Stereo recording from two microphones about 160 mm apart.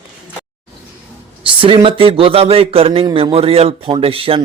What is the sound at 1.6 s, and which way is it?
Speech, 30° right (ahead or behind).